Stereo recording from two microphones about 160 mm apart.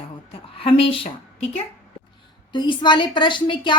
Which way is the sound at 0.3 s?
35° left (ahead or behind).